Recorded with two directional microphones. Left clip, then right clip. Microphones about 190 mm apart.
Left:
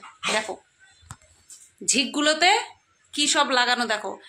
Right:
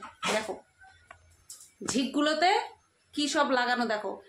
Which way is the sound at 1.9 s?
15° left (ahead or behind).